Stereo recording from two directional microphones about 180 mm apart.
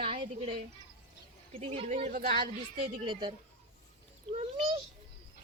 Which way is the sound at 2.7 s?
30° right (ahead or behind).